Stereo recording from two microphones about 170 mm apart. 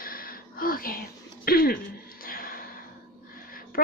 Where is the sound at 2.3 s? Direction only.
60° left (ahead or behind).